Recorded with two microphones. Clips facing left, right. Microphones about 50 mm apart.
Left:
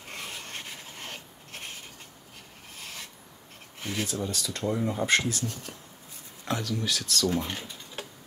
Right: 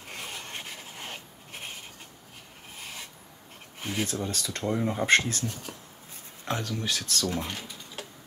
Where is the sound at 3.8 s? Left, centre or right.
Centre.